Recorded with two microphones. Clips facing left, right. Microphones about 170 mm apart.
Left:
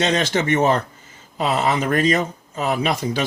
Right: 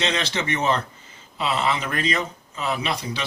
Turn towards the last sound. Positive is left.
turn(degrees=45)  # may be behind; listen again after turning